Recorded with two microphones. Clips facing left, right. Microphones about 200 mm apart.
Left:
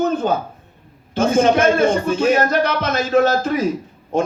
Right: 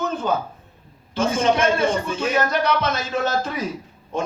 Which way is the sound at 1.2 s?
50° left (ahead or behind).